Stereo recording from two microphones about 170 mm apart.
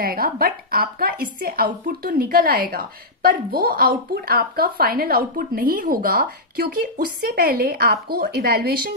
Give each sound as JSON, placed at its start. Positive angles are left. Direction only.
{"t": 0.0, "sound": "a woman's voice", "side_deg": -60}